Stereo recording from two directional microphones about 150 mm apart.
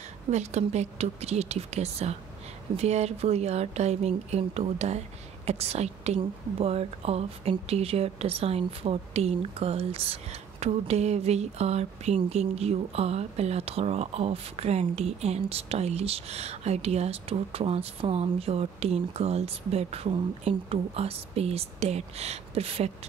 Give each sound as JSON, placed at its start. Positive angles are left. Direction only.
{"t": 0.3, "sound": "a woman's voice", "side_deg": -50}